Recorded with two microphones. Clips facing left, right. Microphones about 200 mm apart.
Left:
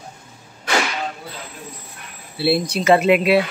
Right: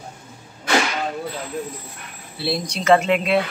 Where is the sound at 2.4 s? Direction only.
10° left (ahead or behind).